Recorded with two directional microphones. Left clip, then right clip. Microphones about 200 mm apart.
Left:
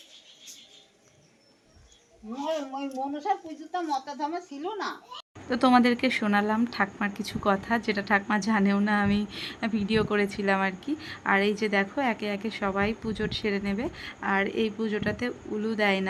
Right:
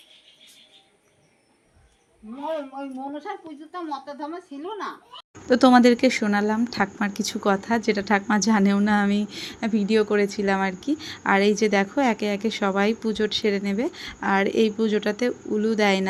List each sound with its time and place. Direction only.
3.2 s speech: 10° right (ahead or behind)
5.5 s speech: 20° right (ahead or behind)